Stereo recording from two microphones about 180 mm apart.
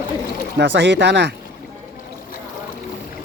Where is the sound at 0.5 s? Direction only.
75° right (ahead or behind).